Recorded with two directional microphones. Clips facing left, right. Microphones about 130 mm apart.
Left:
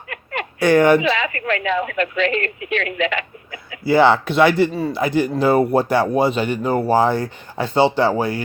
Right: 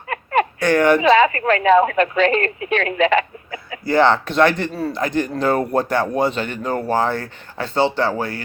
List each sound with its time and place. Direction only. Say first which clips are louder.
0.6 s speech: left 4 dB; 10° left (ahead or behind)
1.1 s a woman's voice: right 8 dB; 35° right (ahead or behind)
3.8 s speech: left 2 dB; 5° left (ahead or behind)